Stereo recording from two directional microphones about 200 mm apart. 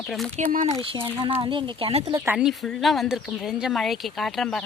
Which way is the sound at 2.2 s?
5° right (ahead or behind).